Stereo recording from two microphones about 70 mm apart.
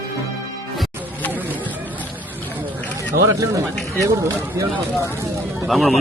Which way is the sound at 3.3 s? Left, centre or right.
Right.